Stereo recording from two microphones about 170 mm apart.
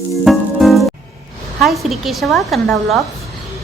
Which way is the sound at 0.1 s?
Centre (ahead or behind).